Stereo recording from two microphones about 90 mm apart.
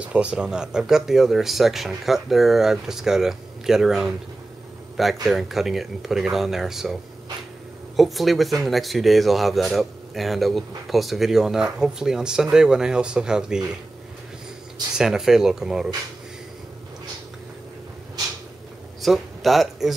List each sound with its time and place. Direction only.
0.0 s speech: 10° right (ahead or behind)
15.0 s speech: 5° right (ahead or behind)
18.9 s speech: centre (ahead or behind)